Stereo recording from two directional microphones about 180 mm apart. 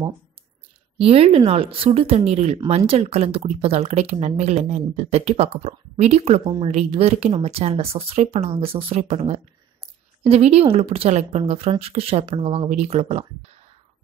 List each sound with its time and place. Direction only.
0.9 s speech: 30° right (ahead or behind)